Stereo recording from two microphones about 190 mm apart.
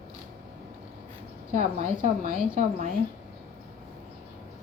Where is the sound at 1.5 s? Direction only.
40° right (ahead or behind).